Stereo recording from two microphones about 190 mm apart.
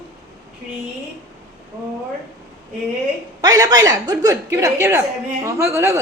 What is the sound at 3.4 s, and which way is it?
A woman's voice, 20° right (ahead or behind).